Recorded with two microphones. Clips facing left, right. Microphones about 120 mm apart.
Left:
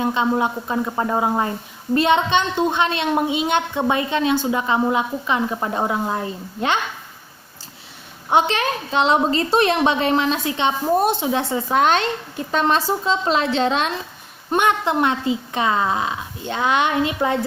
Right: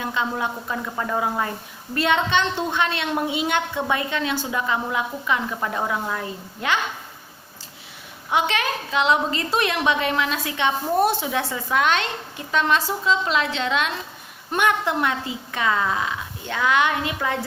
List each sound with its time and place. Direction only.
0.0 s a woman's voice: 25° left (ahead or behind)
8.3 s a woman's voice: 30° left (ahead or behind)
14.5 s a woman's voice: 25° left (ahead or behind)